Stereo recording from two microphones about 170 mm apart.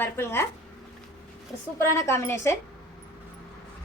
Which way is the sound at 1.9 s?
15° left (ahead or behind).